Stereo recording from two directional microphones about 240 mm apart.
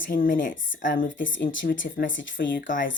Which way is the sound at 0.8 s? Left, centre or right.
Left.